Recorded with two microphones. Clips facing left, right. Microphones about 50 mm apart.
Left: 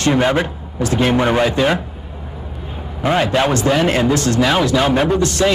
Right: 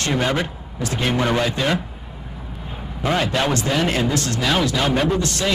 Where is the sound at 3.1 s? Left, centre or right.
Centre.